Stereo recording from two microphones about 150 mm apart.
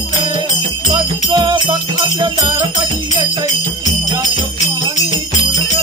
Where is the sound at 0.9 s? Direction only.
30° right (ahead or behind).